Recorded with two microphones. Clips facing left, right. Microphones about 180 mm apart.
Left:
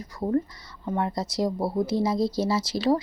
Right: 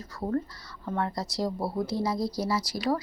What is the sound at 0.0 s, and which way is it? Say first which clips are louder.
Speech: left 4 dB; 15° left (ahead or behind).